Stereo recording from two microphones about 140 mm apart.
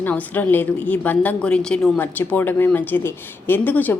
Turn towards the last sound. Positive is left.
turn(degrees=15)  # may be behind; listen again after turning